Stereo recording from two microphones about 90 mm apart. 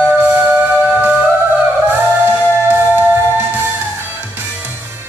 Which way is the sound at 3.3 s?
25° right (ahead or behind).